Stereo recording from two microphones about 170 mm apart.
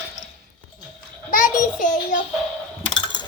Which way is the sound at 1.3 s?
55° left (ahead or behind).